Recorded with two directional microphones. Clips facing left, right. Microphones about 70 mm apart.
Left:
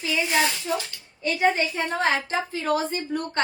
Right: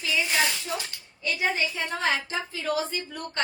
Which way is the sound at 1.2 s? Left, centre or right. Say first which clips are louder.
Left 5 dB; left.